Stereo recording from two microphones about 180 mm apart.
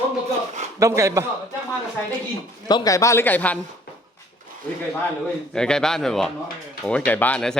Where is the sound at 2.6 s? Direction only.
20° left (ahead or behind).